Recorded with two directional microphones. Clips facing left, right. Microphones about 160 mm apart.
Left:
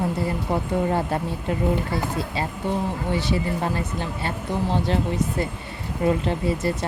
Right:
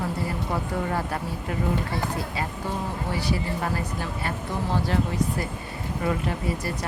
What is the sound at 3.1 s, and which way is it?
Speech, 25° left (ahead or behind).